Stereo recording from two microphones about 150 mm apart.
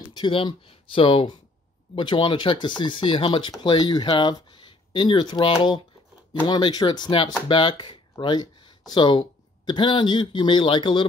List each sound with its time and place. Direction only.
0.0 s speech: 35° left (ahead or behind)